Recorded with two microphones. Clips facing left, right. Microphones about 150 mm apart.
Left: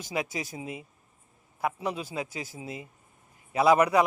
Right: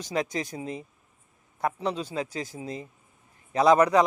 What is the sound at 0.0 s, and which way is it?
A man's voice, 10° left (ahead or behind).